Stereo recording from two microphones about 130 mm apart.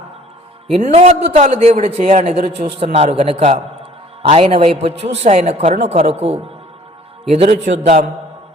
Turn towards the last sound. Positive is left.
turn(degrees=-60)  # may be behind; listen again after turning